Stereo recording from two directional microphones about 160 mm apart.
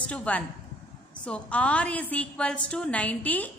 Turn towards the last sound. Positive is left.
turn(degrees=10)  # may be behind; listen again after turning